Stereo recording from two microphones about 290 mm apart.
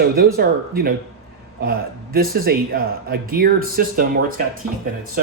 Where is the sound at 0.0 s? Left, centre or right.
Right.